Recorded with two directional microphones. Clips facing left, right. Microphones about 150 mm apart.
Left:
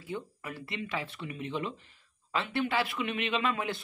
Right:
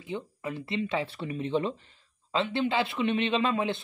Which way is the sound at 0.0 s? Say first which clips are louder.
Right 4 dB; 20° right (ahead or behind).